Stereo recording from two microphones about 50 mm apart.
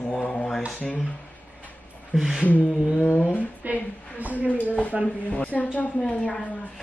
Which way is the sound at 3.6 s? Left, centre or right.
Right.